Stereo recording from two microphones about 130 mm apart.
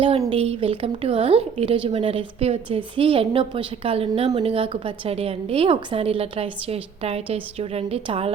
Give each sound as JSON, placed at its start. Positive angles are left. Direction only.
{"t": 0.3, "sound": "a woman's voice", "side_deg": -45}